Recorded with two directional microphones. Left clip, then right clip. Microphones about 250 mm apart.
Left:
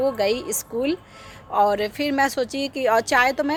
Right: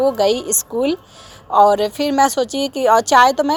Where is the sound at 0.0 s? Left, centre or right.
Centre.